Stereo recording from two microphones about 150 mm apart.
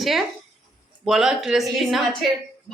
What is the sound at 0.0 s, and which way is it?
Speech, centre (ahead or behind).